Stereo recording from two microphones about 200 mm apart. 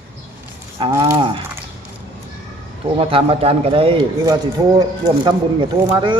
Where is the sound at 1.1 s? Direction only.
25° right (ahead or behind).